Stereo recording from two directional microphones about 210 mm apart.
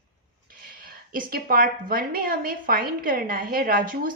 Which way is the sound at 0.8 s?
45° right (ahead or behind).